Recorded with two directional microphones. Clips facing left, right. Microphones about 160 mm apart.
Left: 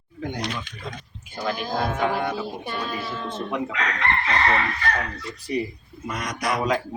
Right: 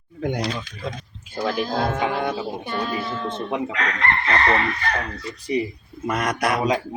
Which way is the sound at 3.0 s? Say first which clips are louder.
Right 3 dB; 5° left (ahead or behind).